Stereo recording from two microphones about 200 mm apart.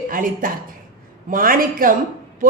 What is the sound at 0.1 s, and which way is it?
A woman's voice, 45° right (ahead or behind).